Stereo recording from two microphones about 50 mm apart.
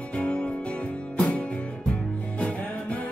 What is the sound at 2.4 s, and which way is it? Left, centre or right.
Music, left.